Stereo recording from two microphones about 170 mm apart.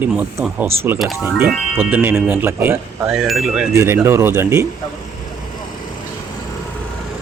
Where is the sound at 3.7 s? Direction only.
15° right (ahead or behind).